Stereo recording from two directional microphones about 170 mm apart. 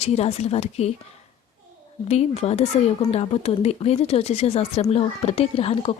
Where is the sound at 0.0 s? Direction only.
40° left (ahead or behind).